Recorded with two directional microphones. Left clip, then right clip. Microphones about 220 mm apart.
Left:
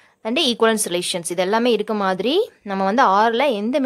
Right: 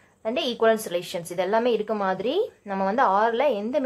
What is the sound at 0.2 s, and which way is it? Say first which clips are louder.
A woman's voice: left 5 dB; 45° left (ahead or behind).